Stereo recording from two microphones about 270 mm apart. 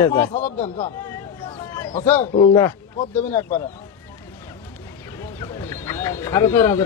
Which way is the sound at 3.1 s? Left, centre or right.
Centre.